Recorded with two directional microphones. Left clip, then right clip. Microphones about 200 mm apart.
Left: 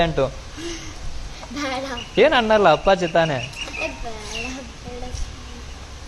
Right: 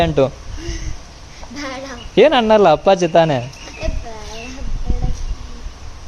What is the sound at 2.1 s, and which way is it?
Speech, 55° right (ahead or behind).